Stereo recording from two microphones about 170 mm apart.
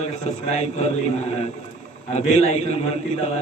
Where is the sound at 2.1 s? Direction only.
40° left (ahead or behind).